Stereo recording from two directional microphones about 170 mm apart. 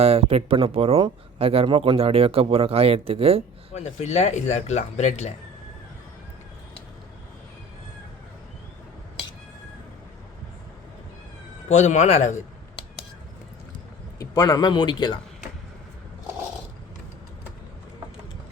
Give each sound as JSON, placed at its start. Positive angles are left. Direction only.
{"t": 0.0, "sound": "speech", "side_deg": -35}
{"t": 3.8, "sound": "speech", "side_deg": 40}
{"t": 11.7, "sound": "speech", "side_deg": 45}
{"t": 14.2, "sound": "speech", "side_deg": 20}